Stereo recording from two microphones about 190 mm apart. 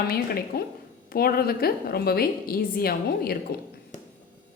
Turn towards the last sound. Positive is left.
turn(degrees=50)  # may be behind; listen again after turning